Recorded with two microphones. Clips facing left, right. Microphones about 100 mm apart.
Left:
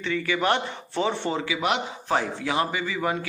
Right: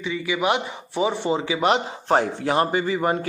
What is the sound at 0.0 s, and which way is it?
Speech, 10° right (ahead or behind).